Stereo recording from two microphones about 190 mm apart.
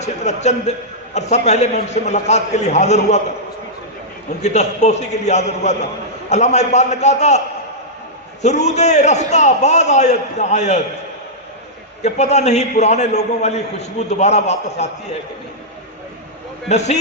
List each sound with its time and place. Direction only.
0.0 s a sound: 35° left (ahead or behind)
1.1 s a man's voice: 35° left (ahead or behind)
4.4 s a man's voice: 35° left (ahead or behind)
12.0 s a man's voice: 35° left (ahead or behind)
16.6 s a man's voice: 35° left (ahead or behind)